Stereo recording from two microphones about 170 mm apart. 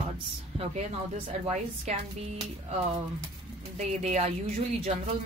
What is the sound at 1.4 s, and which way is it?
Speech, 40° right (ahead or behind).